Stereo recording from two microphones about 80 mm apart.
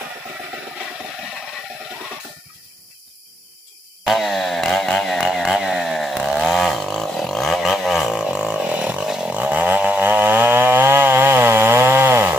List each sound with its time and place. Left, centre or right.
4.0 s chainsaw: centre
7.2 s a sound: centre
9.3 s chainsaw: centre